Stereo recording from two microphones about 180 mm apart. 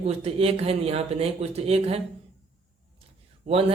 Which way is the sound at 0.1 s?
35° right (ahead or behind).